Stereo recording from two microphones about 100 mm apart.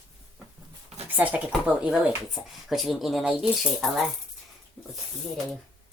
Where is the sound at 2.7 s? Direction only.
Centre (ahead or behind).